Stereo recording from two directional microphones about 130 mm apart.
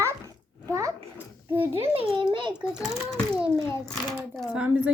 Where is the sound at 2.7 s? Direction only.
Centre (ahead or behind).